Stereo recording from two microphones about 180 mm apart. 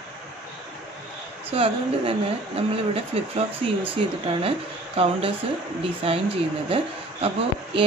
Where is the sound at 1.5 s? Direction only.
30° right (ahead or behind).